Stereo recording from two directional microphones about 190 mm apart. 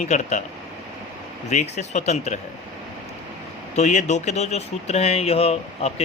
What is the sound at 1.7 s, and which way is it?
Speech, 40° left (ahead or behind).